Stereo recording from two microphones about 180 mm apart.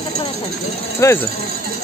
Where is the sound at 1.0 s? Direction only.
15° left (ahead or behind).